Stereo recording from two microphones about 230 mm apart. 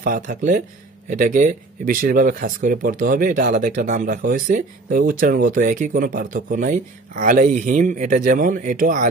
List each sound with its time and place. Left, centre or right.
0.0 s speech: right